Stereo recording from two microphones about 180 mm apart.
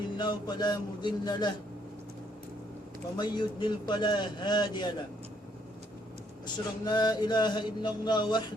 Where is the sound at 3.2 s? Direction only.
25° left (ahead or behind).